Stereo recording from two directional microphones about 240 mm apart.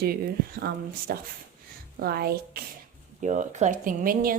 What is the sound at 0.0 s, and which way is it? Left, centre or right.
A woman's voice, right.